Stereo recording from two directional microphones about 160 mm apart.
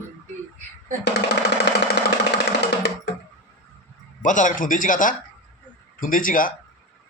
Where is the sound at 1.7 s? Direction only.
90° left.